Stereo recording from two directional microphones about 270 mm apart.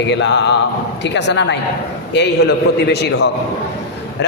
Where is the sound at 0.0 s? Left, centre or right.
Left.